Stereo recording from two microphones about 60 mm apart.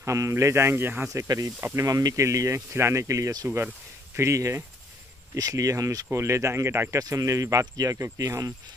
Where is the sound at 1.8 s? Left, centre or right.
Right.